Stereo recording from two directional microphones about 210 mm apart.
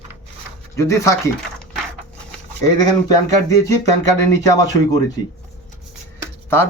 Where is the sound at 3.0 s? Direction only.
15° left (ahead or behind).